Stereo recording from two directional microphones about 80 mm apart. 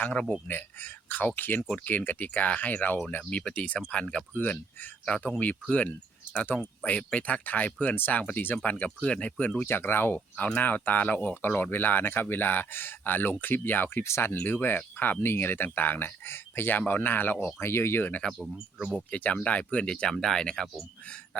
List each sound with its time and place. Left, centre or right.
0.0 s speech: centre
9.6 s speech: left
18.5 s speech: centre
18.9 s speech: centre